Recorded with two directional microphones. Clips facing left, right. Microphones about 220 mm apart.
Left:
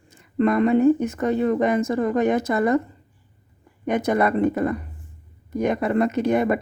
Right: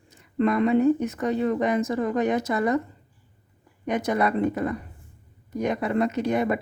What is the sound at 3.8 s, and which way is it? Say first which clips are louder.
Speech: left 3 dB; 50° left (ahead or behind).